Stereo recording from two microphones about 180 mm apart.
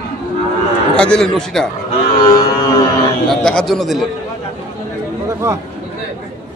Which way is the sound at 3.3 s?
5° left (ahead or behind).